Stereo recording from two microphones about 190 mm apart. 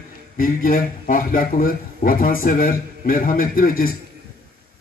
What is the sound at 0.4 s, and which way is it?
A man's voice, 50° left (ahead or behind).